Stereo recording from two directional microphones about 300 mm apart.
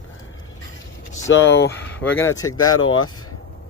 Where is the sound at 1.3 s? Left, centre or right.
Left.